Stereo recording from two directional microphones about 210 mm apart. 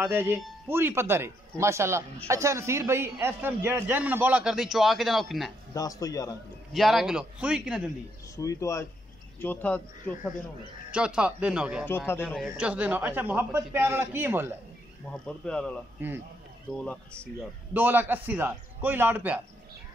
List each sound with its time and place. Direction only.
0.0 s a man's voice: 10° right (ahead or behind)
5.8 s speech: 15° left (ahead or behind)
6.7 s speech: centre (ahead or behind)
8.4 s speech: 15° left (ahead or behind)
10.9 s speech: 5° right (ahead or behind)
12.1 s speech: 10° left (ahead or behind)
12.4 s a man's voice: 5° right (ahead or behind)
15.2 s speech: 5° left (ahead or behind)
16.0 s a man's voice: 10° right (ahead or behind)
16.7 s speech: 5° left (ahead or behind)
17.7 s a man's voice: 10° right (ahead or behind)